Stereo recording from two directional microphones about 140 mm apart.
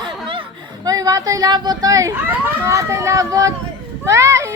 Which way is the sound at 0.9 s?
25° right (ahead or behind).